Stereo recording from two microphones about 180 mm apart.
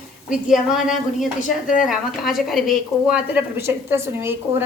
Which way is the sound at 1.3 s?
45° left (ahead or behind).